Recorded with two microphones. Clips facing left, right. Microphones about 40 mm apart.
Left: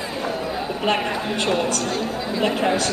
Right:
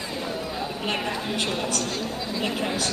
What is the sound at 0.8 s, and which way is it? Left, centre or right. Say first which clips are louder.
Speech: left 7 dB; centre.